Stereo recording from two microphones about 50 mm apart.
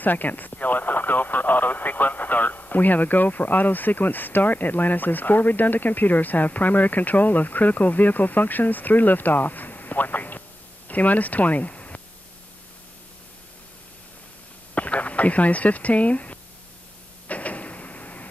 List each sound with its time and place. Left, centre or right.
0.0 s speech: left
14.7 s speech: left
17.3 s a sound: left